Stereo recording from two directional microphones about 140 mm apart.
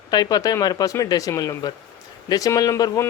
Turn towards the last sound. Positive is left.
turn(degrees=25)  # may be behind; listen again after turning